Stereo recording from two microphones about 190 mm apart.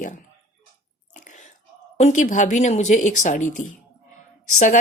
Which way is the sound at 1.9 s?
40° left (ahead or behind).